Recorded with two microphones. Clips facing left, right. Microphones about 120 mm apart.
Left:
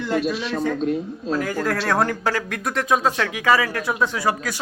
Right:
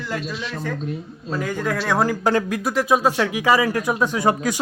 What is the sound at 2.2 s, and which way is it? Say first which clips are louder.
Speech: right 4 dB; 20° right (ahead or behind).